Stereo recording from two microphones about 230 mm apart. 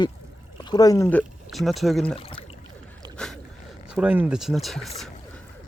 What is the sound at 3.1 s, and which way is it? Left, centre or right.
Boat, centre.